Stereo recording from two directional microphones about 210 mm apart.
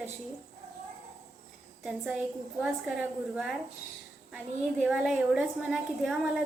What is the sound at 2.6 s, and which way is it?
Speech, 5° right (ahead or behind).